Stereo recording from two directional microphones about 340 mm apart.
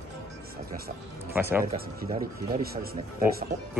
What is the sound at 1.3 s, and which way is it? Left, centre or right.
Speech, centre.